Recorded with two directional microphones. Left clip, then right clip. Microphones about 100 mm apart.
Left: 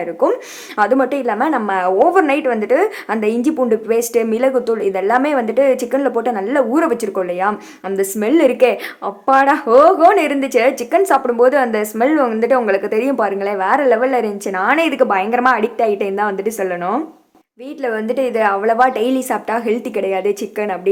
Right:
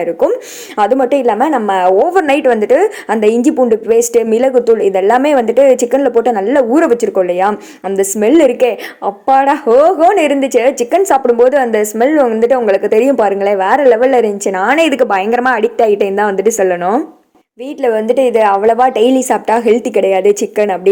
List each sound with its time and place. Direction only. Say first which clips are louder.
0.8 s a woman's voice: right 4 dB; 30° right (ahead or behind)
2.0 s a woman's voice: right 3 dB; 40° right (ahead or behind)